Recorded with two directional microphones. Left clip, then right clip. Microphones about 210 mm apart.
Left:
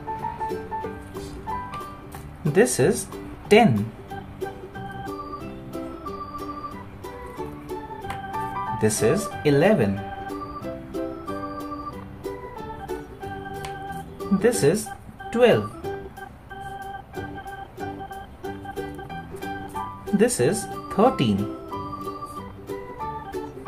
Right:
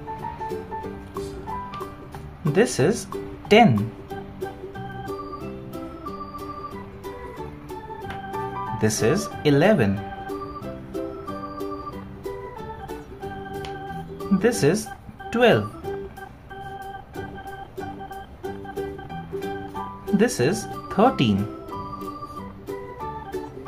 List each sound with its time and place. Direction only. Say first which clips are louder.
0.2 s music: left 2 dB; centre (ahead or behind)
2.4 s speech: left 1 dB; 10° right (ahead or behind)
3.7 s music: right 1 dB; centre (ahead or behind)
8.7 s speech: even; 20° right (ahead or behind)
9.9 s music: even; centre (ahead or behind)
14.4 s speech: left 1 dB; 20° right (ahead or behind)
15.5 s music: even; centre (ahead or behind)
16.8 s organ: left 1 dB; centre (ahead or behind)
18.4 s music: right 2 dB; centre (ahead or behind)
20.2 s speech: left 1 dB; 20° right (ahead or behind)
21.4 s music: left 1 dB; centre (ahead or behind)